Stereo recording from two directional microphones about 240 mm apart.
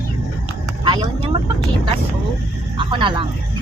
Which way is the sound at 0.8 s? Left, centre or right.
Centre.